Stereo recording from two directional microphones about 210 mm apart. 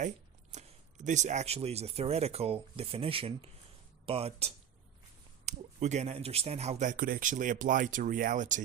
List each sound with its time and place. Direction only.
0.5 s speech: 35° right (ahead or behind)